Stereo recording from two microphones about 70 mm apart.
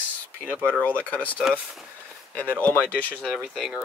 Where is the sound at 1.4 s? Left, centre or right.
Centre.